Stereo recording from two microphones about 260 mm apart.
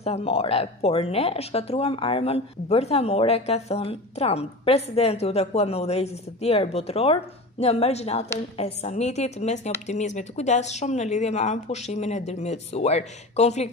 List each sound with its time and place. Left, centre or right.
0.0 s speech: left